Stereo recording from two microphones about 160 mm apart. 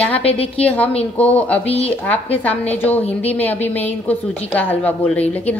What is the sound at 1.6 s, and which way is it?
Speech, 40° left (ahead or behind).